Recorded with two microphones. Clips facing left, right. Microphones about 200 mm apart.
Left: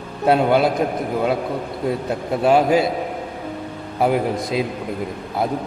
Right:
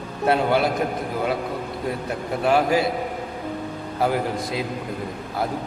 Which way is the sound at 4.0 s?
25° left (ahead or behind).